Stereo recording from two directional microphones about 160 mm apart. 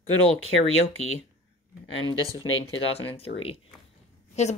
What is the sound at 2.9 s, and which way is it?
A woman's voice, 40° left (ahead or behind).